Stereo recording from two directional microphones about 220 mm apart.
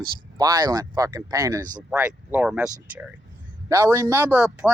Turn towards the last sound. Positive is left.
turn(degrees=-5)  # may be behind; listen again after turning